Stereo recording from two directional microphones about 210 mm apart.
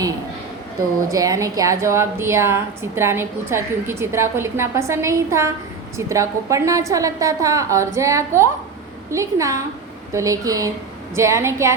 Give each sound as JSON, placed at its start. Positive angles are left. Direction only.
{"t": 1.1, "sound": "a woman's voice", "side_deg": -15}